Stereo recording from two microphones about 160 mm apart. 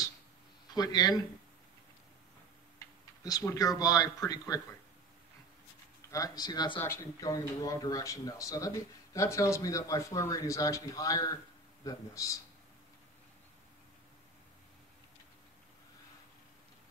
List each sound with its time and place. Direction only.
0.7 s speech: 25° left (ahead or behind)
3.3 s speech: 20° left (ahead or behind)
6.0 s speech: 20° left (ahead or behind)